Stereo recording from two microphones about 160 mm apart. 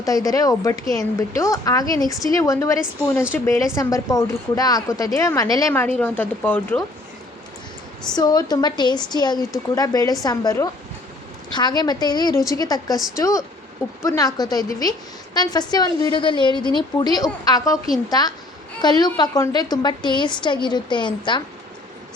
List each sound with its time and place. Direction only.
0.3 s speech: 20° left (ahead or behind)
5.8 s speech: 10° left (ahead or behind)
8.1 s speech: 25° left (ahead or behind)